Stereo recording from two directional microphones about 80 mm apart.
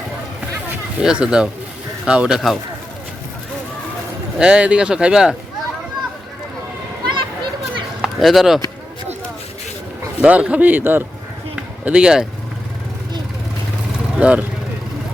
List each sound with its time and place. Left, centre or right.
0.9 s speech: centre
4.4 s speech: centre
7.0 s children playing: right
8.0 s speech: centre
10.2 s speech: centre
11.5 s a sound: centre
14.2 s speech: centre